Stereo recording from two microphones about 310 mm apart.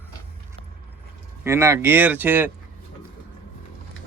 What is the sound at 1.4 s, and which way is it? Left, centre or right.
Speech, centre.